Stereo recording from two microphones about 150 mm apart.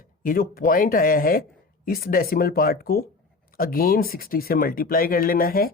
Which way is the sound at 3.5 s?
70° left (ahead or behind).